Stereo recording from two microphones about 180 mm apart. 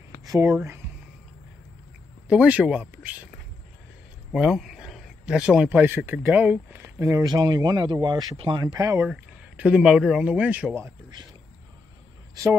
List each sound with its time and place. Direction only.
0.2 s speech: 15° right (ahead or behind)
2.2 s speech: 5° right (ahead or behind)
4.3 s speech: centre (ahead or behind); by 9.0 s 20° right (ahead or behind)
9.0 s speech: 5° right (ahead or behind)